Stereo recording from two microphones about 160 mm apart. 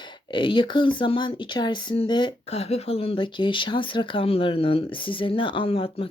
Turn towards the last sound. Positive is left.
turn(degrees=35)  # may be behind; listen again after turning